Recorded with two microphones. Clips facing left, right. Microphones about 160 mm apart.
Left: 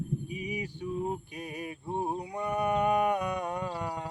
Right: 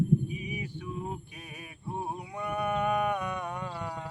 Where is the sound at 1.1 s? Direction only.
35° left (ahead or behind).